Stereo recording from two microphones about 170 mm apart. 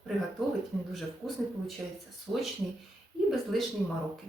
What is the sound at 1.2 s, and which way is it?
Speech, centre (ahead or behind).